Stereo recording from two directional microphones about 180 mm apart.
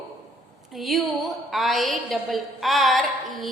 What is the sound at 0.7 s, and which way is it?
A woman's voice, centre (ahead or behind).